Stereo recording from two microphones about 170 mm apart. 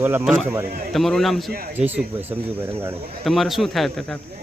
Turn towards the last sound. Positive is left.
turn(degrees=0)  # may be behind; listen again after turning